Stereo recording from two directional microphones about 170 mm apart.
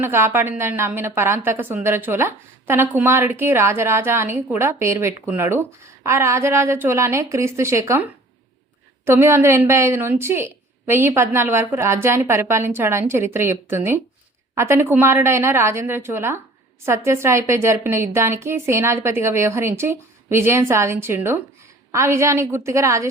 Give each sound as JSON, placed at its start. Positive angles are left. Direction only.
{"t": 0.0, "sound": "a woman's voice", "side_deg": -15}
{"t": 9.0, "sound": "a woman's voice", "side_deg": -15}